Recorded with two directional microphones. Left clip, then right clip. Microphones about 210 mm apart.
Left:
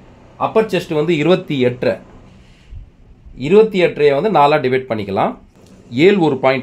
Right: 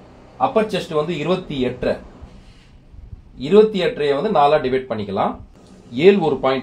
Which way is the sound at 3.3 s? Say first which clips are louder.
Left 2 dB; 55° left (ahead or behind).